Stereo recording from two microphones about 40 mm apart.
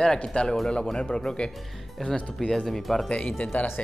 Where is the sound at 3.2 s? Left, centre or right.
Left.